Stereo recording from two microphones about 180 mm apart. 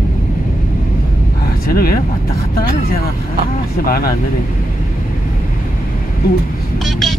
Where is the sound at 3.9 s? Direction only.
55° left (ahead or behind).